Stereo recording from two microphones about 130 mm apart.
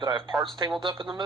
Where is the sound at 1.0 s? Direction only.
35° right (ahead or behind).